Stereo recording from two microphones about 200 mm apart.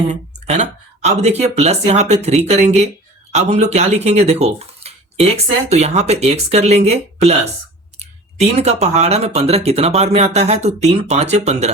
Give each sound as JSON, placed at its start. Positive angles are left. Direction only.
{"t": 0.1, "sound": "speech", "side_deg": -35}